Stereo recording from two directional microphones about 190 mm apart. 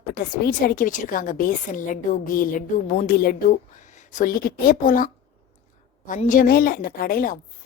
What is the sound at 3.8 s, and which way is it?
A woman's voice, 40° left (ahead or behind).